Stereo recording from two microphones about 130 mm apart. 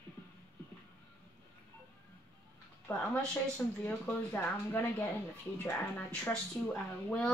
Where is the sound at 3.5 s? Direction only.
15° left (ahead or behind).